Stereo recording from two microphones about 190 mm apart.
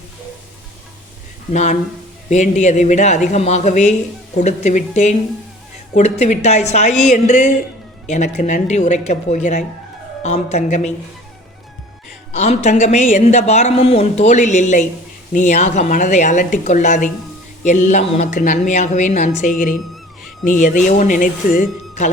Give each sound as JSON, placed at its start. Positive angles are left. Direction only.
{"t": 1.5, "sound": "speech", "side_deg": 40}
{"t": 12.3, "sound": "speech", "side_deg": 35}